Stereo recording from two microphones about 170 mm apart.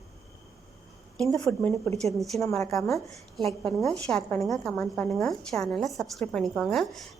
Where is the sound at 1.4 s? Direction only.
10° left (ahead or behind).